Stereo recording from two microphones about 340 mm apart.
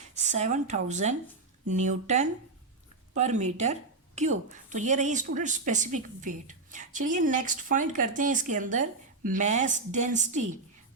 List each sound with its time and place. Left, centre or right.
0.0 s a woman's voice: right